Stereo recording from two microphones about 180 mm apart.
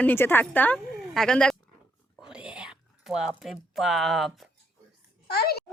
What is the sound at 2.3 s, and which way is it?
Whispering, 5° right (ahead or behind).